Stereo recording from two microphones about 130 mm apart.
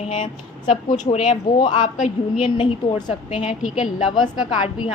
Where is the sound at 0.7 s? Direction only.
50° left (ahead or behind).